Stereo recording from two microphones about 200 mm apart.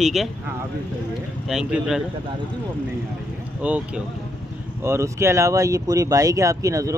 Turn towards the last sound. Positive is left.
turn(degrees=-15)  # may be behind; listen again after turning